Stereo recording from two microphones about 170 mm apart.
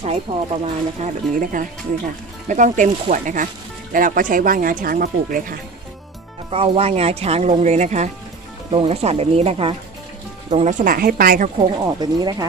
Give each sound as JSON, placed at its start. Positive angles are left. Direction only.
{"t": 0.0, "sound": "speech", "side_deg": -40}
{"t": 1.0, "sound": "speech", "side_deg": -55}
{"t": 6.5, "sound": "speech", "side_deg": -35}
{"t": 11.7, "sound": "speech", "side_deg": -25}